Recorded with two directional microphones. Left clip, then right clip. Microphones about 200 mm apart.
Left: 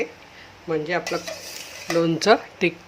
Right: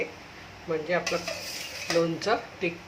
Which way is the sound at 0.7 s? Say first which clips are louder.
Left 3 dB; 50° left (ahead or behind).